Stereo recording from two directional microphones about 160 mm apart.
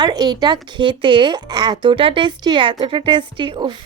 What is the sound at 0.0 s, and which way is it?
A woman's voice, 25° right (ahead or behind).